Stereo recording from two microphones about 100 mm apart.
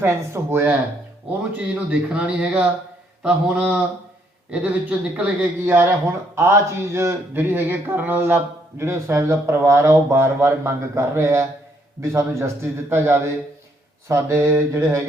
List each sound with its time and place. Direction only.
0.0 s speech: 25° right (ahead or behind)
1.5 s speech: 10° right (ahead or behind); by 15.0 s 30° right (ahead or behind)